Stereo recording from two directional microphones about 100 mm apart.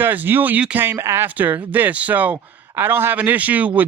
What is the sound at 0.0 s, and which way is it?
Speech, 20° right (ahead or behind).